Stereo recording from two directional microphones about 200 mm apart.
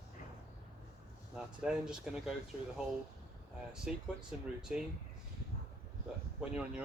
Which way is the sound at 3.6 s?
5° right (ahead or behind).